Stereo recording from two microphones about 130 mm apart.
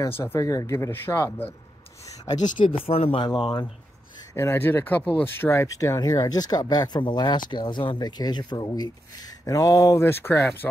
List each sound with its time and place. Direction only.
0.2 s speech: 25° left (ahead or behind)
2.7 s speech: 45° left (ahead or behind)
3.3 s speech: 35° left (ahead or behind)
4.4 s speech: 20° left (ahead or behind)